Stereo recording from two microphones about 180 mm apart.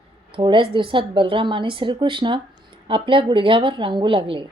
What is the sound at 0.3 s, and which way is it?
A woman's voice, 25° right (ahead or behind).